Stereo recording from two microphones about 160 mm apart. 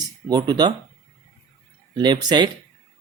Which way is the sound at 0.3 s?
25° right (ahead or behind).